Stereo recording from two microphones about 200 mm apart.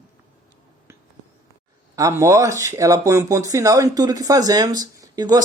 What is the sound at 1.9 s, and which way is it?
Speech, 15° right (ahead or behind).